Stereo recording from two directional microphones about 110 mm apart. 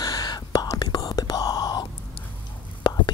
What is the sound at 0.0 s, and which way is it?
Whispering, 35° left (ahead or behind).